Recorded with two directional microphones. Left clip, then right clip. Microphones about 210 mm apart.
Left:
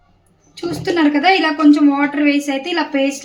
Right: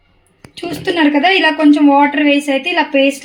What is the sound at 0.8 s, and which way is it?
A woman's voice, 25° right (ahead or behind).